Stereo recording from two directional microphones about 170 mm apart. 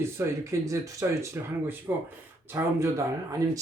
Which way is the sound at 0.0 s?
15° right (ahead or behind).